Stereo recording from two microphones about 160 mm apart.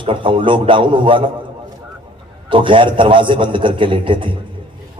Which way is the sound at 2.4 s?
30° right (ahead or behind).